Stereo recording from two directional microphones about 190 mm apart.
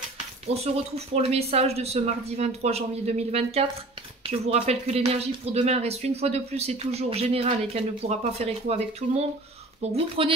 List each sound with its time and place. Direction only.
0.5 s speech: 35° right (ahead or behind)